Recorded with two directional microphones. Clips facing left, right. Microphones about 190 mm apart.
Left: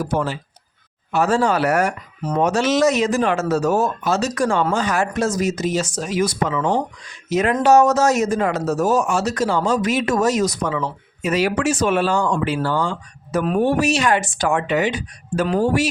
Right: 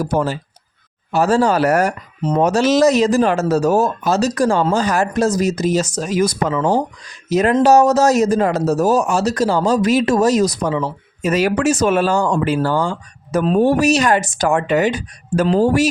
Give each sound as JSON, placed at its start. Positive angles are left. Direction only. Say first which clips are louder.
{"t": 0.0, "sound": "speech", "louder": "right 3 dB", "side_deg": -40}